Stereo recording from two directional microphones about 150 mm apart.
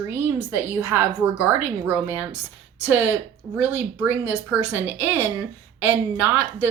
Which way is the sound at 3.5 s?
10° right (ahead or behind).